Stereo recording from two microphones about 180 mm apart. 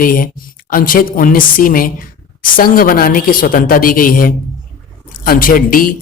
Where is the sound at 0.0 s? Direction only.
50° left (ahead or behind).